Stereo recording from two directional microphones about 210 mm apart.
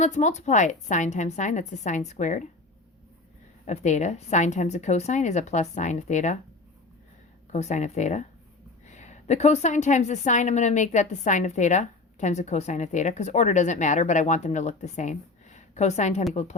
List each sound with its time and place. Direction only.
0.0 s a woman's voice: 35° left (ahead or behind)
3.7 s a woman's voice: 35° left (ahead or behind)
7.5 s a woman's voice: 35° left (ahead or behind)